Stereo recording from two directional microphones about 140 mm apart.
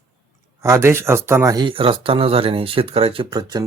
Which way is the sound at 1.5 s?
35° right (ahead or behind).